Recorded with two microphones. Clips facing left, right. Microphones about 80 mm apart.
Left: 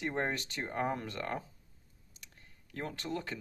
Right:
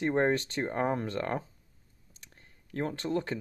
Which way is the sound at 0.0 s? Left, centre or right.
Right.